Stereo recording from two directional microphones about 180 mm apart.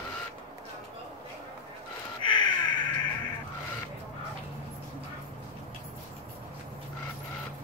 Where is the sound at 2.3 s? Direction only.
25° left (ahead or behind).